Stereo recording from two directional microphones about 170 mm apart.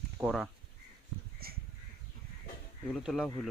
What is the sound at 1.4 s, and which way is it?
Crow, 65° right (ahead or behind).